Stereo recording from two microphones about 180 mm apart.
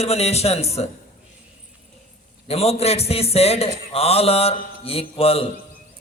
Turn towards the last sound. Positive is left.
turn(degrees=35)  # may be behind; listen again after turning